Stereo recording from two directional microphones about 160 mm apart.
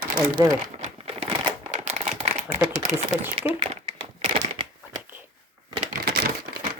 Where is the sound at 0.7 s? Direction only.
40° right (ahead or behind).